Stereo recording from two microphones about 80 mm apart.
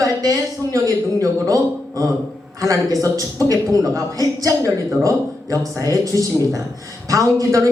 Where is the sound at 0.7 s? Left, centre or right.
Right.